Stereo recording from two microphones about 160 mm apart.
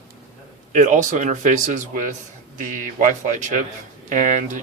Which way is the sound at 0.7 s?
50° right (ahead or behind).